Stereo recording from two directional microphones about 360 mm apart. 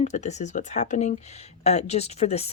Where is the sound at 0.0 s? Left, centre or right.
Centre.